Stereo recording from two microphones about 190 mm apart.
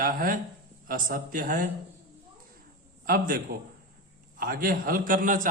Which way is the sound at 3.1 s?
50° right (ahead or behind).